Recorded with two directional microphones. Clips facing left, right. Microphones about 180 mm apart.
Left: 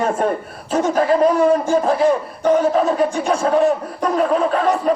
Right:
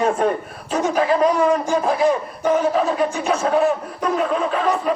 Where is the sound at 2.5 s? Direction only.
40° left (ahead or behind).